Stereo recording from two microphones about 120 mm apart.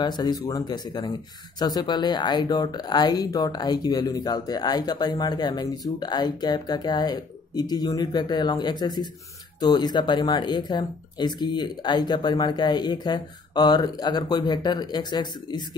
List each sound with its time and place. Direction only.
0.0 s speech: 35° left (ahead or behind)